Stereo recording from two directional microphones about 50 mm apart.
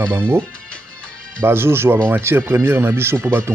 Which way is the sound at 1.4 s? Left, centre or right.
Right.